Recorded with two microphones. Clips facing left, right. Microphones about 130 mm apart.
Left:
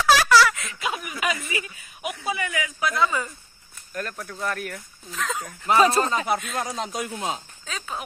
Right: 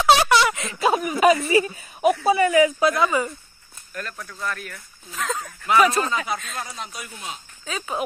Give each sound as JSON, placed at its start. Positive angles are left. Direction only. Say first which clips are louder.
{"t": 0.0, "sound": "a sound", "louder": "right 1 dB", "side_deg": -25}
{"t": 2.2, "sound": "a woman's voice", "louder": "right 10 dB", "side_deg": -30}
{"t": 3.9, "sound": "speech", "louder": "left 2 dB", "side_deg": 35}
{"t": 5.1, "sound": "speech", "louder": "right 2 dB", "side_deg": 0}
{"t": 5.7, "sound": "speech", "louder": "even", "side_deg": 30}
{"t": 6.6, "sound": "speech", "louder": "left 6 dB", "side_deg": 90}
{"t": 7.6, "sound": "speech", "louder": "right 8 dB", "side_deg": -5}